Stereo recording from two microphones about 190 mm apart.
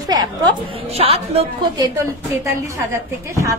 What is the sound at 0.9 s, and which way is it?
Speech, 30° right (ahead or behind).